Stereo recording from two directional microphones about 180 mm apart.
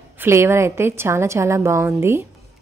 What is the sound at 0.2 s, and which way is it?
A woman's voice, 15° right (ahead or behind).